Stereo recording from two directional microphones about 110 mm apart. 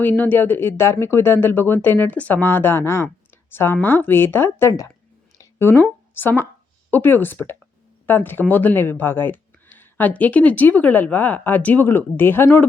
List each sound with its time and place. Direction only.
0.0 s speech: 15° left (ahead or behind)
5.4 s a sound: 25° left (ahead or behind)
6.9 s speech: 20° left (ahead or behind)